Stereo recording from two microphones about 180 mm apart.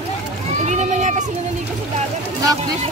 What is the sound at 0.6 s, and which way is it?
Run, 40° right (ahead or behind).